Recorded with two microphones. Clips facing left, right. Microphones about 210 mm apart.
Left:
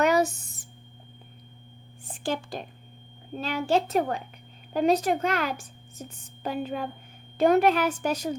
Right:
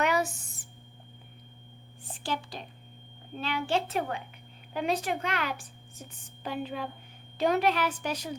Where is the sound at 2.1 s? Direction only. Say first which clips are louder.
Left 5 dB; 50° left (ahead or behind).